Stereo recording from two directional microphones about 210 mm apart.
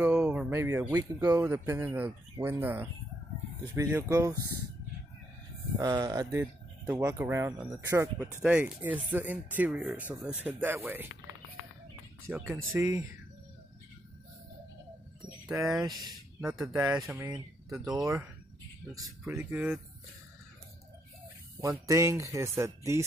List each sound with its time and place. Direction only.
0.0 s speech: 10° right (ahead or behind)
5.8 s speech: 15° right (ahead or behind)
12.3 s speech: 5° right (ahead or behind)
15.5 s speech: 15° right (ahead or behind)
16.3 s speech: centre (ahead or behind)
16.6 s speech: 15° right (ahead or behind)
16.9 s speech: centre (ahead or behind)
19.2 s speech: 10° right (ahead or behind)
21.5 s speech: 15° right (ahead or behind)